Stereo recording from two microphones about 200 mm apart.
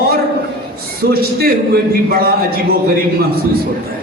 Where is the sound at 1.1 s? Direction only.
50° right (ahead or behind).